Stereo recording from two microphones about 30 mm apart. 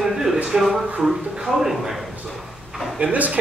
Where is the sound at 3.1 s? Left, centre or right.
Right.